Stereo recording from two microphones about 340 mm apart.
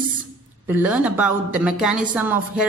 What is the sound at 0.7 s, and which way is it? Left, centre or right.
A woman's voice, centre.